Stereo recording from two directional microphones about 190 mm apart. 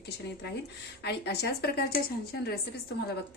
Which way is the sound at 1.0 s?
60° left (ahead or behind).